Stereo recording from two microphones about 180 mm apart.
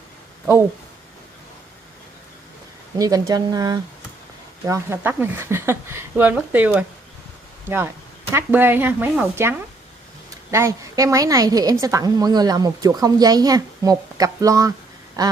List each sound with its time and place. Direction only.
3.0 s a woman's voice: 20° right (ahead or behind)